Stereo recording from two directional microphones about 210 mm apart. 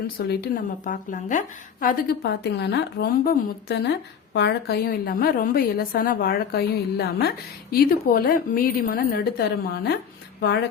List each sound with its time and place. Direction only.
0.2 s a woman's voice: 45° left (ahead or behind)